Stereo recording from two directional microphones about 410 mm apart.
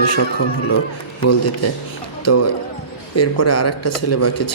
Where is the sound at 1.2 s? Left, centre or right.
Left.